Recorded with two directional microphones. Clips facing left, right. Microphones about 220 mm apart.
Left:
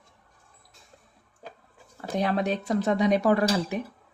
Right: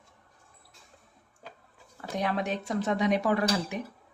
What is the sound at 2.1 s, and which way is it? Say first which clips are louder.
Speech: left 4 dB; 35° left (ahead or behind).